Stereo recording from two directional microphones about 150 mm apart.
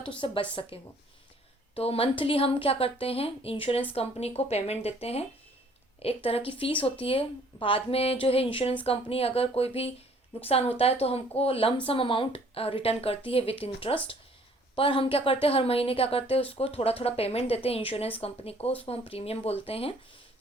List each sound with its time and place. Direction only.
0.2 s a woman's voice: 35° left (ahead or behind)